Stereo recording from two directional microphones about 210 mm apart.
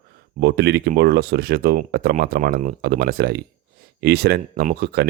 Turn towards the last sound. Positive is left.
turn(degrees=-50)  # may be behind; listen again after turning